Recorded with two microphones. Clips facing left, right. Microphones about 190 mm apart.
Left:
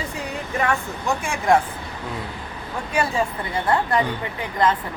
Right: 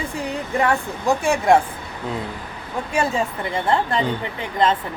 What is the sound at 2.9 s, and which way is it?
Speech, 25° right (ahead or behind).